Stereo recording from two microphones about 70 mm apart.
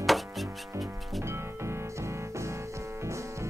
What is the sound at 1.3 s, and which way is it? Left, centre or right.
Music, right.